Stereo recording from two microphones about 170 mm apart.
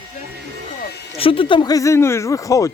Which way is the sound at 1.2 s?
30° left (ahead or behind).